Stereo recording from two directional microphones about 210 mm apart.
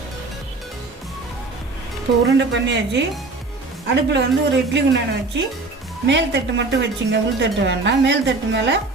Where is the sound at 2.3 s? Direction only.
60° right (ahead or behind).